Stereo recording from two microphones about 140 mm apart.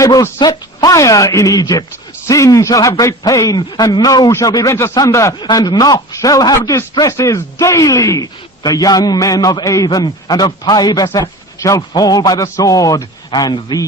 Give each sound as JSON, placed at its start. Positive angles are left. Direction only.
{"t": 0.0, "sound": "a man's voice", "side_deg": 25}